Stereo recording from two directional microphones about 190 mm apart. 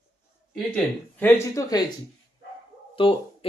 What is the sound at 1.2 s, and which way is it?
Speech, 15° left (ahead or behind).